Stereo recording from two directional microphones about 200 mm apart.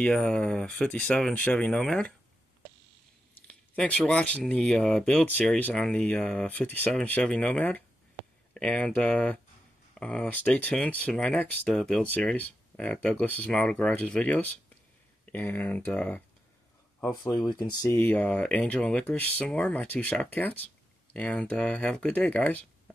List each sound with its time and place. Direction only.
0.0 s speech: 5° left (ahead or behind)
3.4 s speech: 5° left (ahead or behind)
17.5 s speech: 20° left (ahead or behind)